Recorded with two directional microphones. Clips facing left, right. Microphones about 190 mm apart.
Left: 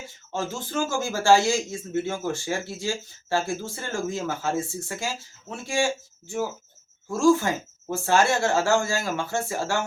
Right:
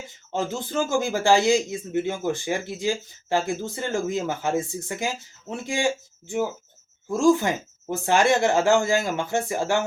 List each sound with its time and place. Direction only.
0.9 s speech: 15° right (ahead or behind)